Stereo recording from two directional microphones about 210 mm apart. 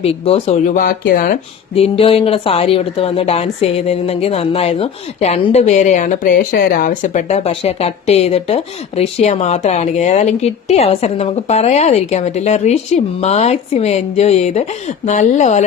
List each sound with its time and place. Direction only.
0.0 s speech: 30° left (ahead or behind)
1.7 s speech: 25° left (ahead or behind)